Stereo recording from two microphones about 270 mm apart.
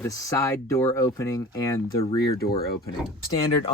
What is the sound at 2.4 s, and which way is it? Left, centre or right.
Speech, left.